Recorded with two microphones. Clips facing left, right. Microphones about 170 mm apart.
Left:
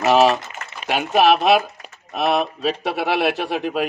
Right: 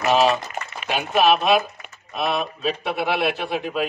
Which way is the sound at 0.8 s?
80° left.